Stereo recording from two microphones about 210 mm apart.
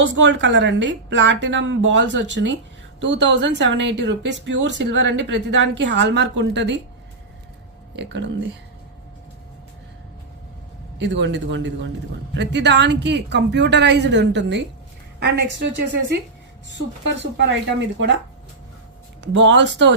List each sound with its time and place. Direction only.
0.0 s speech: 60° right (ahead or behind)
7.9 s speech: 55° right (ahead or behind)
10.9 s speech: 60° right (ahead or behind)
16.6 s speech: 60° right (ahead or behind)
19.2 s speech: 60° right (ahead or behind)